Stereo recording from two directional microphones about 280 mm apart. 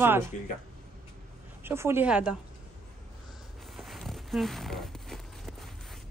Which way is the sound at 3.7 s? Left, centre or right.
Centre.